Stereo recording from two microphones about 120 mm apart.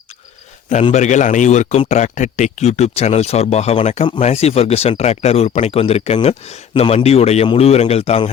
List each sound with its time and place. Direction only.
0.9 s a man's voice: 90° left; by 8.3 s 60° left (ahead or behind)